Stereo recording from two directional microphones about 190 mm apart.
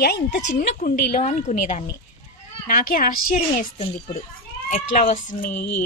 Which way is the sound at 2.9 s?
45° left (ahead or behind).